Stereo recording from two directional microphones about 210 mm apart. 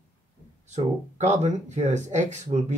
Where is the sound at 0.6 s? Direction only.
35° right (ahead or behind).